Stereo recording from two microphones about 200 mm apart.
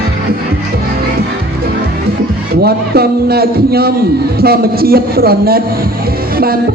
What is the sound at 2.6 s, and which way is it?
A man's voice, 50° right (ahead or behind).